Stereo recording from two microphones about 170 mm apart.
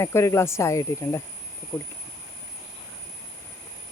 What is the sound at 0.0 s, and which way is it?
Speech, 15° left (ahead or behind).